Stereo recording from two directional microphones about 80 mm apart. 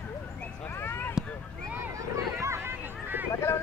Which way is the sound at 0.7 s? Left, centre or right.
Left.